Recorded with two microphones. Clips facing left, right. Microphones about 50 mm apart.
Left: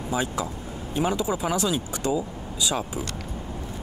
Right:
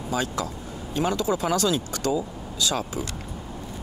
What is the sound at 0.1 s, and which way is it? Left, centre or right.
Speech, centre.